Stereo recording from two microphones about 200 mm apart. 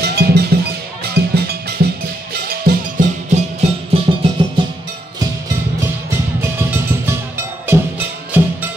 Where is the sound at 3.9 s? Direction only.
30° right (ahead or behind).